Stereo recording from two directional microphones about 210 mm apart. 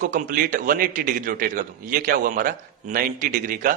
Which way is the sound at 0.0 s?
40° right (ahead or behind).